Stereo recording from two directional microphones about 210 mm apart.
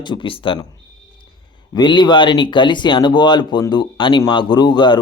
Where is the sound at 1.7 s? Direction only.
20° left (ahead or behind).